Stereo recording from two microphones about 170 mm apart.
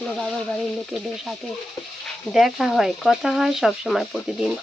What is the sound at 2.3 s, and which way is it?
Speech, centre (ahead or behind).